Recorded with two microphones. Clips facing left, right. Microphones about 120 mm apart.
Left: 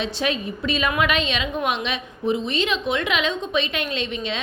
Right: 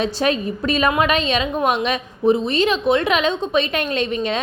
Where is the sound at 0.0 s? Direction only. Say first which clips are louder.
Right 5 dB; 45° right (ahead or behind).